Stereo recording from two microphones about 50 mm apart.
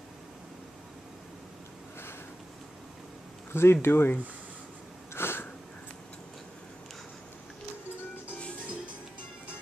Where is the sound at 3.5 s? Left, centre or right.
Left.